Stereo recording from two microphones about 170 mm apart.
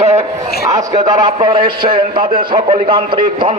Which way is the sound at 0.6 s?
20° right (ahead or behind).